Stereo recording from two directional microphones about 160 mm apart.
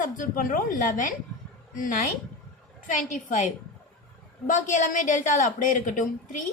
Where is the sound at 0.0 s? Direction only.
60° left (ahead or behind).